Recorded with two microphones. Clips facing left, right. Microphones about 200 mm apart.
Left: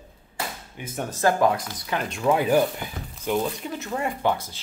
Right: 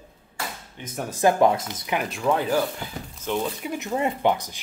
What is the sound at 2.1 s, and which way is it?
Speech, centre (ahead or behind).